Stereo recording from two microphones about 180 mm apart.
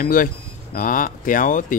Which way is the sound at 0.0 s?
50° left (ahead or behind).